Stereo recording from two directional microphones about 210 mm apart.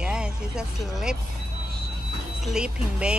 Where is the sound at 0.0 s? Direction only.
5° right (ahead or behind).